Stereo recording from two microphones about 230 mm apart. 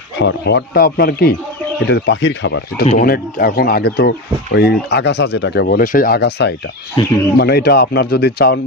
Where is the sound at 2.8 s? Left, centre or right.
Left.